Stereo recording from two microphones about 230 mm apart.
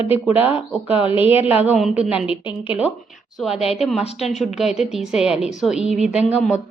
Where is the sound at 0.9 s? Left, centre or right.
Left.